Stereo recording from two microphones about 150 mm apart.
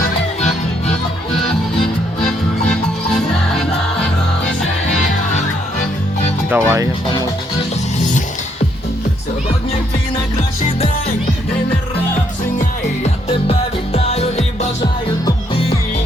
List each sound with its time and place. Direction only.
6.5 s speech: 15° right (ahead or behind)
7.9 s music: 55° left (ahead or behind)
13.5 s music: 45° left (ahead or behind)